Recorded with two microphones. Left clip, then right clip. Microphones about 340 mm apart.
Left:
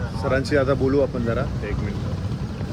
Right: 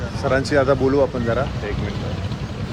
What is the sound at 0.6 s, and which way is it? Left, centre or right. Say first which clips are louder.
Speech: right 5 dB; right.